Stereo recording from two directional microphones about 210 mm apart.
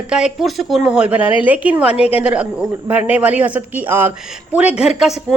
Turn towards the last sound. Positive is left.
turn(degrees=0)  # may be behind; listen again after turning